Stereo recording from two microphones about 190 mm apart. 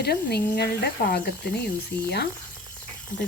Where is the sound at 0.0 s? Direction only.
55° left (ahead or behind).